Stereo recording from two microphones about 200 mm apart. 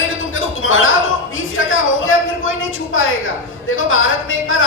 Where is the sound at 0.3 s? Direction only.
85° left.